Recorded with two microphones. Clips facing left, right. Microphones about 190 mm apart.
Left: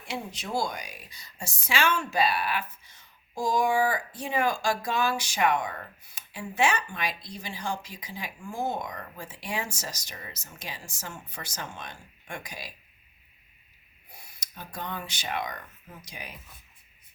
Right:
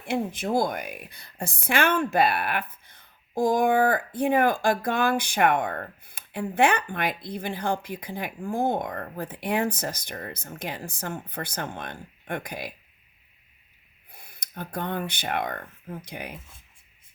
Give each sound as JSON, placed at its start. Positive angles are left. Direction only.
{"t": 0.0, "sound": "speech", "side_deg": -55}
{"t": 14.1, "sound": "speech", "side_deg": -55}